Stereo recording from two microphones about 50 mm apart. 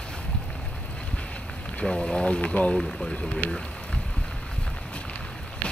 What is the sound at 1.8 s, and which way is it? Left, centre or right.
Speech, centre.